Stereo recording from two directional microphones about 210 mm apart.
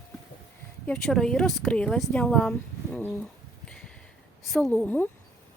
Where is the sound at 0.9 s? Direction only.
5° left (ahead or behind).